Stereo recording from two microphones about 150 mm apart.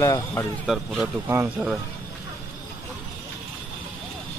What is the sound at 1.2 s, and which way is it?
Speech, 15° right (ahead or behind).